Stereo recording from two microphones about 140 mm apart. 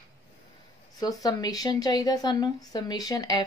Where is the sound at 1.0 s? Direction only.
25° left (ahead or behind).